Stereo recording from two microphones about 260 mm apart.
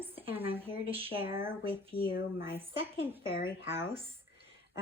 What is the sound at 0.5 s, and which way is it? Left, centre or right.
Speech, right.